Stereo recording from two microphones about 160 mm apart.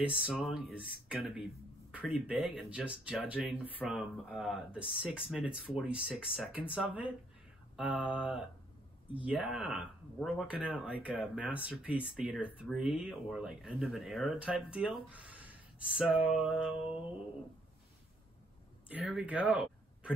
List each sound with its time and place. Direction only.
0.0 s speech: 5° right (ahead or behind)
18.9 s speech: 10° right (ahead or behind)